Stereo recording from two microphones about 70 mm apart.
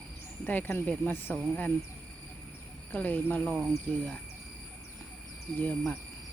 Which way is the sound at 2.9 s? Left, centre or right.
Left.